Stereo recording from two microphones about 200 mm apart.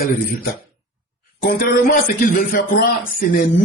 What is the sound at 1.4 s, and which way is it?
A man's voice, 40° left (ahead or behind).